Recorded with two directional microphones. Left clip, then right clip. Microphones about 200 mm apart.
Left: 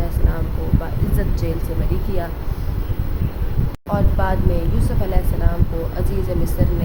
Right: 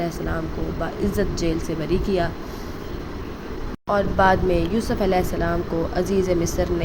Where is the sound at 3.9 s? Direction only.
20° right (ahead or behind).